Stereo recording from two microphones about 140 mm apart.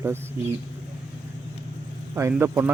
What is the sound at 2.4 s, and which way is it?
Speech, 15° right (ahead or behind).